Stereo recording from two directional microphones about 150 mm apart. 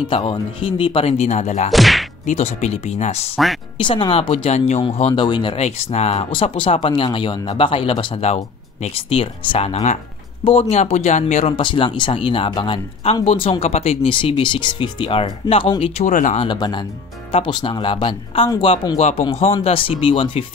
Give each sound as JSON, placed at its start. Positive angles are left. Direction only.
{"t": 0.0, "sound": "speech", "side_deg": 35}
{"t": 1.7, "sound": "whack", "side_deg": 0}
{"t": 2.2, "sound": "speech", "side_deg": 50}
{"t": 3.7, "sound": "speech", "side_deg": 35}
{"t": 11.5, "sound": "speech", "side_deg": 35}
{"t": 16.1, "sound": "speech", "side_deg": 60}
{"t": 16.3, "sound": "speech", "side_deg": 30}